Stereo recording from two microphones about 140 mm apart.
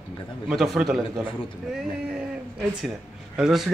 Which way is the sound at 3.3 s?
5° right (ahead or behind).